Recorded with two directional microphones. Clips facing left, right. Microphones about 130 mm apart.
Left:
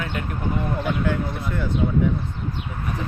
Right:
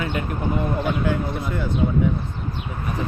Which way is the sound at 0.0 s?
5° right (ahead or behind).